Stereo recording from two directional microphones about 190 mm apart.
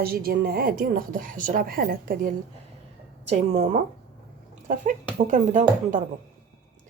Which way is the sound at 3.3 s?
35° right (ahead or behind).